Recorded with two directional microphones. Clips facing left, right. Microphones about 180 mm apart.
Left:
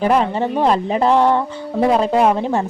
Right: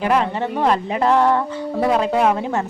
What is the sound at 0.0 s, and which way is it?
A woman's voice, 35° left (ahead or behind).